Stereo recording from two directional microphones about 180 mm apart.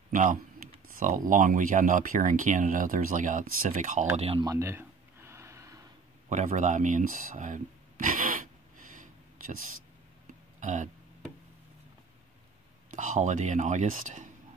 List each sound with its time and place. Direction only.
0.1 s speech: 45° right (ahead or behind)
4.2 s speech: 30° right (ahead or behind)
4.5 s a sound: 15° right (ahead or behind)
6.2 s a sound: 40° right (ahead or behind)
10.6 s throat clearing: 45° right (ahead or behind)
12.9 s speech: 45° right (ahead or behind)